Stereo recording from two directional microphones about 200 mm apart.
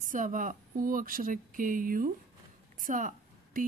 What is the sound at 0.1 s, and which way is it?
A woman's voice, 40° right (ahead or behind).